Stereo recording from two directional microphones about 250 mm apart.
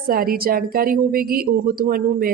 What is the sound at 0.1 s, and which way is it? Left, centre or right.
A woman's voice, right.